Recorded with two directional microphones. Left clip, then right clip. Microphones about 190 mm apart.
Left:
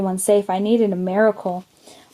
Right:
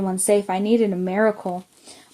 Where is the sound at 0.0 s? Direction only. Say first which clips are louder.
Left 2 dB; 30° left (ahead or behind).